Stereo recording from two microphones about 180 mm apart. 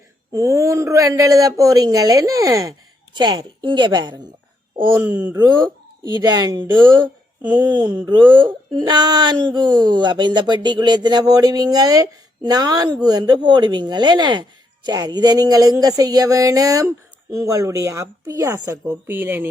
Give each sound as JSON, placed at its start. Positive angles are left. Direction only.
{"t": 0.3, "sound": "speech", "side_deg": -15}
{"t": 5.0, "sound": "a woman's voice", "side_deg": -10}
{"t": 5.3, "sound": "a woman's voice", "side_deg": -25}